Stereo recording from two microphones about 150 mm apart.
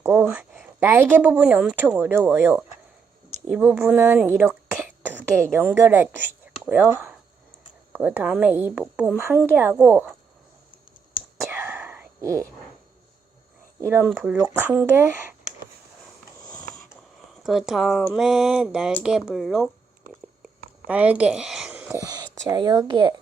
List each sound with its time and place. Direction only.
0.0 s a woman's voice: 15° right (ahead or behind)
11.3 s whispering: 15° right (ahead or behind)
13.7 s a woman's voice: 15° right (ahead or behind)
17.4 s a sound: 5° right (ahead or behind)
20.8 s speech: 10° right (ahead or behind)
21.9 s speech: 25° right (ahead or behind)